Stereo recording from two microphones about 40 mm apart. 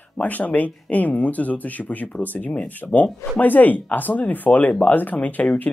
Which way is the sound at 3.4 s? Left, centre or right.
Left.